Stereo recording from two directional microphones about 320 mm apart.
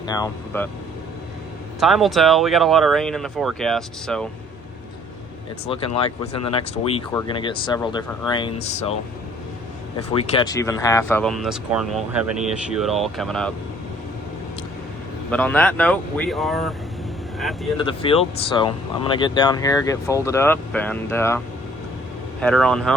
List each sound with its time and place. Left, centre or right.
0.1 s speech: centre
1.8 s speech: centre
5.6 s speech: centre
10.2 s speech: centre
15.3 s speech: centre
17.7 s speech: centre